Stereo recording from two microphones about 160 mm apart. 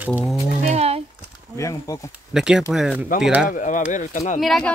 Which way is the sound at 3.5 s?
55° left (ahead or behind).